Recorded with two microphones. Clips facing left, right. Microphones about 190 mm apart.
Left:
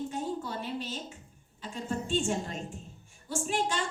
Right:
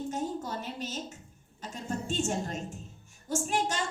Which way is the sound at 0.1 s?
45° right (ahead or behind).